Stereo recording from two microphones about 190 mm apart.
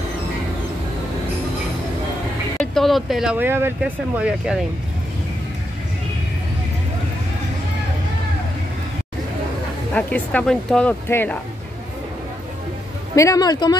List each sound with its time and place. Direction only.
2.6 s speech: centre (ahead or behind)
9.9 s speech: 5° left (ahead or behind)
13.1 s speech: 15° left (ahead or behind)